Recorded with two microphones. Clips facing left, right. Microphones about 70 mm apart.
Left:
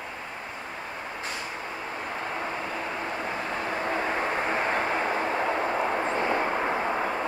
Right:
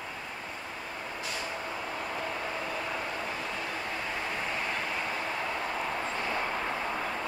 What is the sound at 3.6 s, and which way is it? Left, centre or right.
Vehicle, left.